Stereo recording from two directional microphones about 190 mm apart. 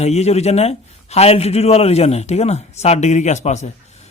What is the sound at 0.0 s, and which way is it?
Speech, 35° left (ahead or behind).